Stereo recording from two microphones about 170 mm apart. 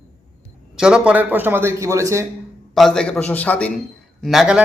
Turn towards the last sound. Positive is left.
turn(degrees=-5)  # may be behind; listen again after turning